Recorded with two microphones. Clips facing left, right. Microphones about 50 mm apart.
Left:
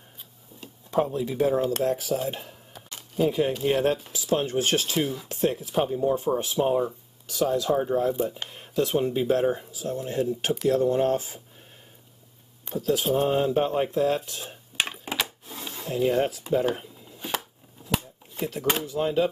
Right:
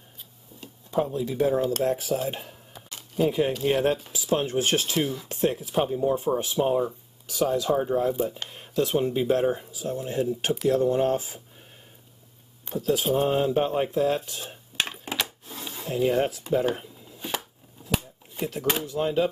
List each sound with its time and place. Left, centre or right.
1.2 s speech: centre
1.8 s speech: centre
2.2 s dishes: centre
3.6 s speech: centre
4.9 s speech: centre
5.3 s speech: centre
12.6 s speech: centre
14.8 s coin: centre
15.8 s speech: centre